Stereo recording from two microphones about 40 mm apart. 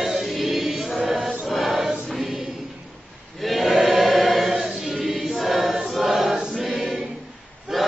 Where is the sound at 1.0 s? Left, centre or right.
Centre.